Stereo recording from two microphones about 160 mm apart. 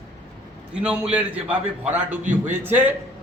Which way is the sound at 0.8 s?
5° right (ahead or behind).